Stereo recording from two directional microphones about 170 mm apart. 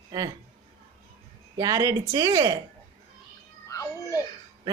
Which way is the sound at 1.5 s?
20° right (ahead or behind).